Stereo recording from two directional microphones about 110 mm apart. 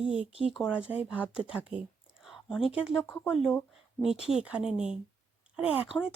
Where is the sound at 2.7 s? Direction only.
10° right (ahead or behind).